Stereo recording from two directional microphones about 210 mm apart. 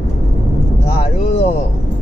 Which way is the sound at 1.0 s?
30° left (ahead or behind).